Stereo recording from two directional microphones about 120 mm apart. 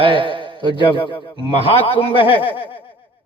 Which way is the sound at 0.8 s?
45° left (ahead or behind).